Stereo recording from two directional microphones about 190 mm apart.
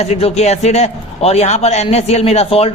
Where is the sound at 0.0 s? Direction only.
35° left (ahead or behind).